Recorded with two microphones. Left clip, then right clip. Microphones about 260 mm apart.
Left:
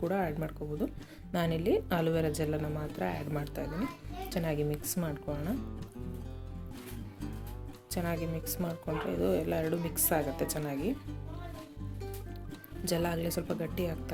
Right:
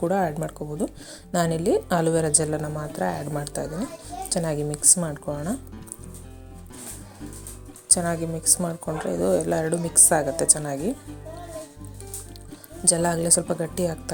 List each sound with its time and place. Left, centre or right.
0.0 s a woman's voice: right
7.9 s a woman's voice: right
12.8 s a woman's voice: right